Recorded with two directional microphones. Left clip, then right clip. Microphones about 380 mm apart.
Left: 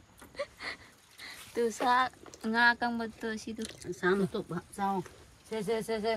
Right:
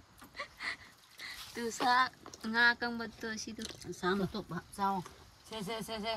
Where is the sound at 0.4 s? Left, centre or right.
Centre.